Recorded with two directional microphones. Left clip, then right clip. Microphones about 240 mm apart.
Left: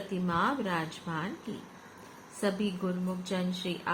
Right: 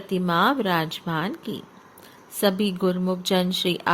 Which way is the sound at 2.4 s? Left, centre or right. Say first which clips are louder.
Right 10 dB; right.